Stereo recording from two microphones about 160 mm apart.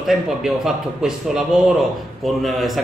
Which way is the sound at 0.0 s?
Centre (ahead or behind).